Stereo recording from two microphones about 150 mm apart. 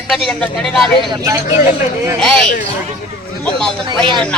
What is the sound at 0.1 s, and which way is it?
Speech, centre (ahead or behind).